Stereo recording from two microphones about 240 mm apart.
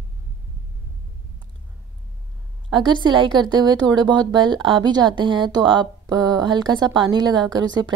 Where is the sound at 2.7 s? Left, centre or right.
Centre.